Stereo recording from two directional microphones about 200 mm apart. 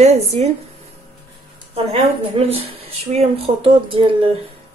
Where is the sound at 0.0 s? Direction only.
30° right (ahead or behind).